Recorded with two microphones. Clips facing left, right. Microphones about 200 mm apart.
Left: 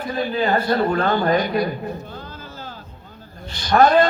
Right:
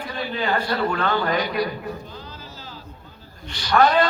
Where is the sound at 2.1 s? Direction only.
50° left (ahead or behind).